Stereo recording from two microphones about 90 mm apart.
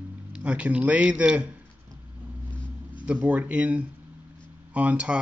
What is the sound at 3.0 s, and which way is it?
Speech, 15° right (ahead or behind).